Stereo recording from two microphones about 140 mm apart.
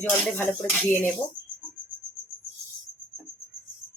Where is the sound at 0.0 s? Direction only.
15° left (ahead or behind).